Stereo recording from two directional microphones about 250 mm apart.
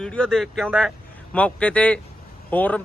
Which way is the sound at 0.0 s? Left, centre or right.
Centre.